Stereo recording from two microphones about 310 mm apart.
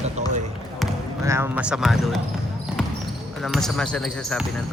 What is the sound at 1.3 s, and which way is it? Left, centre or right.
Speech, centre.